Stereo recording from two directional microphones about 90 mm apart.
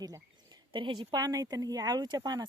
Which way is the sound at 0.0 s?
50° right (ahead or behind).